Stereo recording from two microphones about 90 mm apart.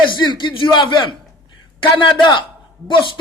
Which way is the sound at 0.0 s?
60° left (ahead or behind).